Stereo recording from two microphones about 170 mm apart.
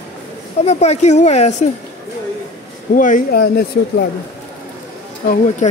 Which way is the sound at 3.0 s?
50° left (ahead or behind).